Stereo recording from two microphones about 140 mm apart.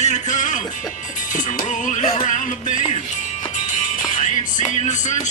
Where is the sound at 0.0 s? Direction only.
60° left (ahead or behind).